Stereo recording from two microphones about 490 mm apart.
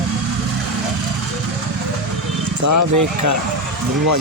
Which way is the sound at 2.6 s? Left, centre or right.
Right.